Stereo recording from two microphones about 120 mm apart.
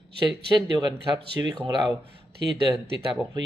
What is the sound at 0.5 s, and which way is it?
Speech, 40° right (ahead or behind).